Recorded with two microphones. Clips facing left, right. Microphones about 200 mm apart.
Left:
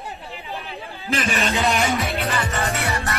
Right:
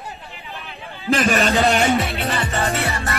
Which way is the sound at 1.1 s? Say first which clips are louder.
Right 6 dB; 50° right (ahead or behind).